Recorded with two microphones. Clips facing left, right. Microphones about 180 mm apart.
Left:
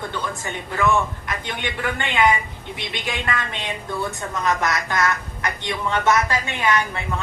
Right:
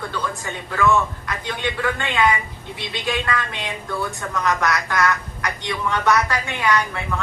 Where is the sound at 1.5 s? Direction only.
20° left (ahead or behind).